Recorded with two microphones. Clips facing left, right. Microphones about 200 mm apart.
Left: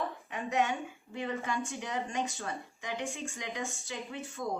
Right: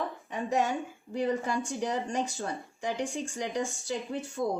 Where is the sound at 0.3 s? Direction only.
35° right (ahead or behind).